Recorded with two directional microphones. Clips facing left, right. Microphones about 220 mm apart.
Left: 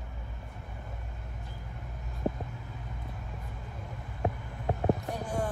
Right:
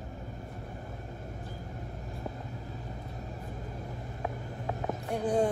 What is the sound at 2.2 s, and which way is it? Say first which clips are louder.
Vehicle: left 9 dB; 45° left (ahead or behind).